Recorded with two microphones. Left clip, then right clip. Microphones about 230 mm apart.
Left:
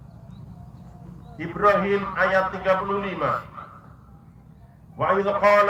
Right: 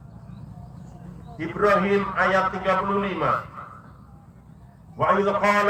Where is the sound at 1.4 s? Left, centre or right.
Centre.